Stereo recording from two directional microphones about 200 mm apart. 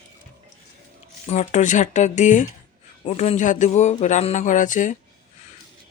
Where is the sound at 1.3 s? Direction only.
35° left (ahead or behind).